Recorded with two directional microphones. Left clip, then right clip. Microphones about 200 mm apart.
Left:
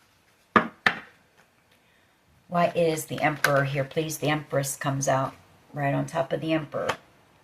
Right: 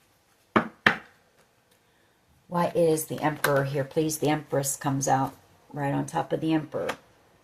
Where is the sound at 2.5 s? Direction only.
45° right (ahead or behind).